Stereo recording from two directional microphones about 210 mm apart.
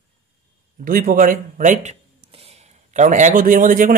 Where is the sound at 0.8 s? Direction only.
40° right (ahead or behind).